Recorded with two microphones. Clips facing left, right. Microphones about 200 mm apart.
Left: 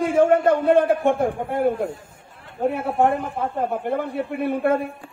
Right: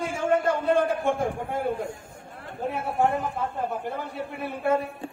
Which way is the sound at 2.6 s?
55° left (ahead or behind).